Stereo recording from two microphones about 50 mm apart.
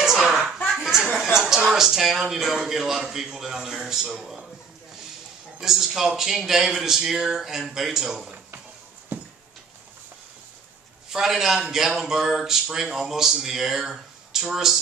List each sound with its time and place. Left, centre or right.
0.0 s a sound: centre
2.6 s speech: centre
5.6 s speech: centre
11.1 s speech: centre